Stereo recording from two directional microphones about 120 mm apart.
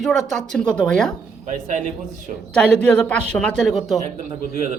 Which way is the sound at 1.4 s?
75° right (ahead or behind).